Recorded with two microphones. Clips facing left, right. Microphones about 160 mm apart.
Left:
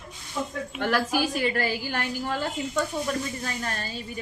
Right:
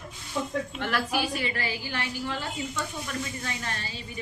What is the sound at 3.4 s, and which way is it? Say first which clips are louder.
Speech: left 3 dB; 40° left (ahead or behind).